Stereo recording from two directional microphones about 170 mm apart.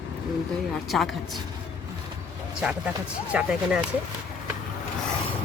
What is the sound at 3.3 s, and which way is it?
Speech, 5° right (ahead or behind).